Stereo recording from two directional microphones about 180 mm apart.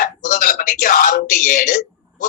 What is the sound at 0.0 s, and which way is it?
Speech, 50° left (ahead or behind).